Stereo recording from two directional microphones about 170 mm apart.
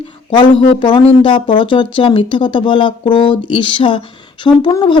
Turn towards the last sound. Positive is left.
turn(degrees=25)  # may be behind; listen again after turning